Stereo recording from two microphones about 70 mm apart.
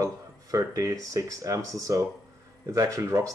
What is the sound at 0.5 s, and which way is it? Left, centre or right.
Speech, right.